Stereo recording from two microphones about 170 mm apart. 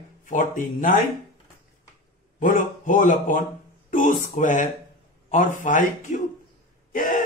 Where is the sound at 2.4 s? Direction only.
50° left (ahead or behind).